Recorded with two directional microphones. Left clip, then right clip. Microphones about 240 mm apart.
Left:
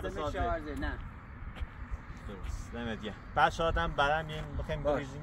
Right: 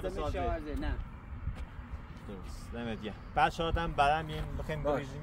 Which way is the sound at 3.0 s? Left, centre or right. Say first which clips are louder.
Left 1 dB; centre.